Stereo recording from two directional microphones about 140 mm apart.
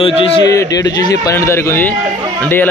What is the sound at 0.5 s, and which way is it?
A man's voice, 25° left (ahead or behind).